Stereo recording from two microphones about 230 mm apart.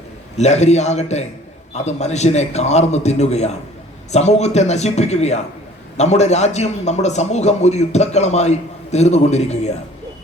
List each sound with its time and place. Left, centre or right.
0.3 s a man's voice: left